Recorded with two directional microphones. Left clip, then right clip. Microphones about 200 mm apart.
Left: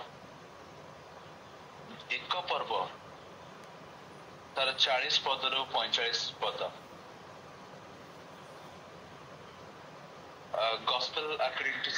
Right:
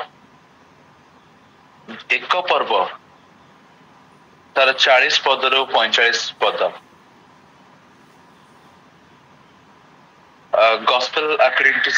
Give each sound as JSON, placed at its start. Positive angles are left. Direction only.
{"t": 2.0, "sound": "speech", "side_deg": -45}
{"t": 4.6, "sound": "speech", "side_deg": -45}
{"t": 10.5, "sound": "speech", "side_deg": -45}